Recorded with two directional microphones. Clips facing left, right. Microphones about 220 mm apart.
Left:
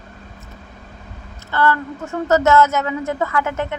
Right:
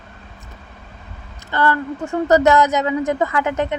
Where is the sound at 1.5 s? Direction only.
15° right (ahead or behind).